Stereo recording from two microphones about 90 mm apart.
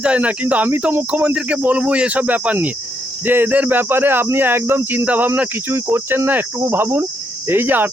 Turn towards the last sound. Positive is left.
turn(degrees=-25)  # may be behind; listen again after turning